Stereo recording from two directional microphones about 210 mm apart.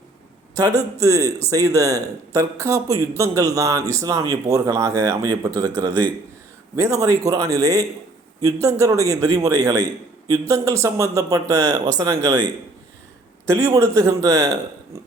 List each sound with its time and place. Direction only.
0.5 s speech: 15° right (ahead or behind)
6.7 s speech: 15° right (ahead or behind)
13.5 s speech: 15° right (ahead or behind)